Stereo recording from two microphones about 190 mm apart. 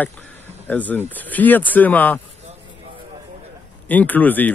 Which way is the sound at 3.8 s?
10° left (ahead or behind).